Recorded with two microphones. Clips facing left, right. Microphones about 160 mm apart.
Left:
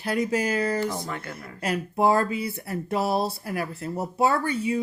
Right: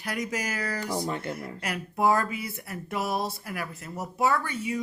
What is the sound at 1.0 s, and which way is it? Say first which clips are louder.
Speech: right 3 dB; 25° right (ahead or behind).